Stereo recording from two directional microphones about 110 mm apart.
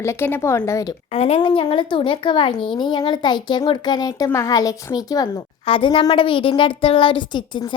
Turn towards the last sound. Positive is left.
turn(degrees=45)  # may be behind; listen again after turning